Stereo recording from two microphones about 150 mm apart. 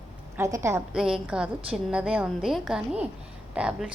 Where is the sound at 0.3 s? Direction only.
20° right (ahead or behind).